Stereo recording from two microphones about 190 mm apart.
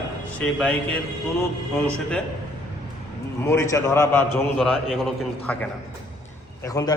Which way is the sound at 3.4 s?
15° left (ahead or behind).